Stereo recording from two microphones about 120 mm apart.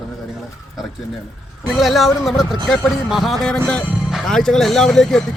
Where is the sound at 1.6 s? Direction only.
Centre (ahead or behind).